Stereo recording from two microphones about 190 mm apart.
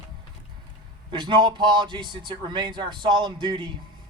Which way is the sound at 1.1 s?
25° right (ahead or behind).